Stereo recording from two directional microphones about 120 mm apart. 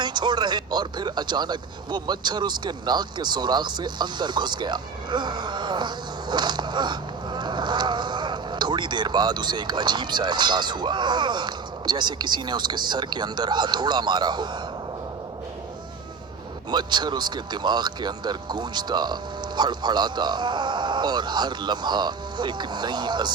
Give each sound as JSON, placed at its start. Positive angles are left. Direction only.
{"t": 0.0, "sound": "speech", "side_deg": -40}
{"t": 16.7, "sound": "speech", "side_deg": -35}